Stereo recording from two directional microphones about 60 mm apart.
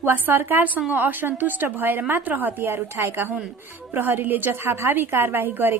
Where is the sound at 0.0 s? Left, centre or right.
Right.